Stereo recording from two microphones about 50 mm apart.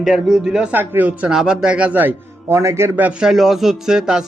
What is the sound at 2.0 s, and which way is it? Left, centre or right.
Speech, right.